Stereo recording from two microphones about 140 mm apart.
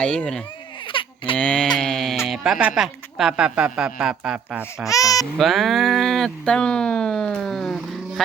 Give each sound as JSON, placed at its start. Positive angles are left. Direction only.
{"t": 0.0, "sound": "speech", "side_deg": 5}
{"t": 0.9, "sound": "baby cry", "side_deg": 40}
{"t": 1.4, "sound": "speech", "side_deg": 5}
{"t": 4.9, "sound": "speech", "side_deg": 25}
{"t": 5.4, "sound": "speech", "side_deg": 0}